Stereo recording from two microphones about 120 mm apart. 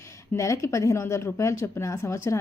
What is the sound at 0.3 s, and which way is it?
A woman's voice, 25° left (ahead or behind).